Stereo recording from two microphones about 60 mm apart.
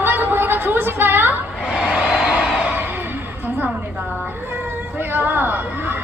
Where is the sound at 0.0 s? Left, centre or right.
Right.